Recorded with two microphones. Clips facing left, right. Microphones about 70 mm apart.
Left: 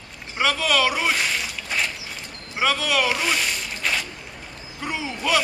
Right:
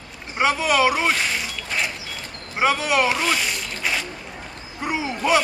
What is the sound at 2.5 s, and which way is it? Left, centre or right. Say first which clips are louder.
Speech: right 3 dB; right.